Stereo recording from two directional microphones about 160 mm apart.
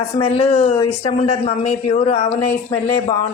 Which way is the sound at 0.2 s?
35° left (ahead or behind).